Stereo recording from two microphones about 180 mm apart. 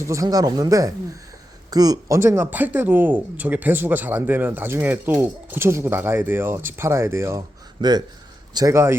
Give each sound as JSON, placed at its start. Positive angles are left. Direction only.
{"t": 0.0, "sound": "speech", "side_deg": -15}